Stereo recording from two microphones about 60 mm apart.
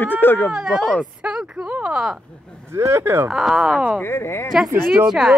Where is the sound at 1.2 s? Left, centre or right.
Centre.